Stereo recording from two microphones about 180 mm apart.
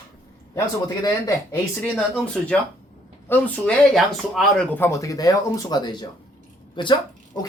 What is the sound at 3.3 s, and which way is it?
Speech, 10° left (ahead or behind).